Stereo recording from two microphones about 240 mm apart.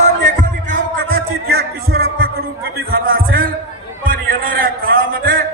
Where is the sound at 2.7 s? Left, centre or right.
Right.